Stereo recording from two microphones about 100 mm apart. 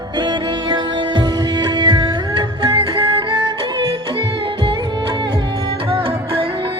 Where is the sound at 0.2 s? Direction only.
45° right (ahead or behind).